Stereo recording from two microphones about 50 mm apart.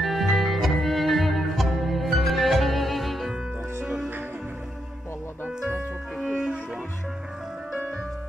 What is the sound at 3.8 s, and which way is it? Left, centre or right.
Music, centre.